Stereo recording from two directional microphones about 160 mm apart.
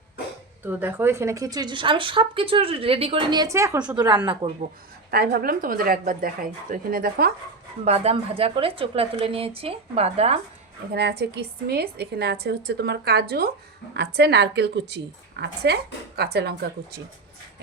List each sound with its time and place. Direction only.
0.6 s a woman's voice: 10° right (ahead or behind)
5.1 s a woman's voice: 75° right (ahead or behind)
7.9 s a woman's voice: 40° right (ahead or behind)
10.9 s a woman's voice: 90° right